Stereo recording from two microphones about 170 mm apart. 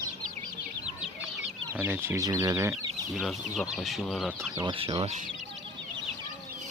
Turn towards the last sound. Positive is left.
turn(degrees=-35)  # may be behind; listen again after turning